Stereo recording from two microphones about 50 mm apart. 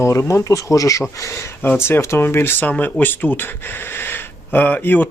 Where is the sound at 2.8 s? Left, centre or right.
Left.